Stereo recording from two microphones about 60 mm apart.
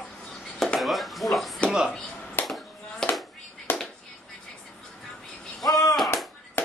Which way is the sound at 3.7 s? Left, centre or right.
Left.